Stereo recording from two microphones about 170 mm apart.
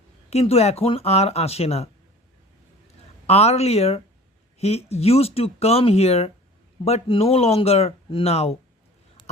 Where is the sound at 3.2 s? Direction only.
40° left (ahead or behind).